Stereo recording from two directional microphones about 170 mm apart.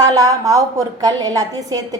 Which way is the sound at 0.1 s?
20° right (ahead or behind).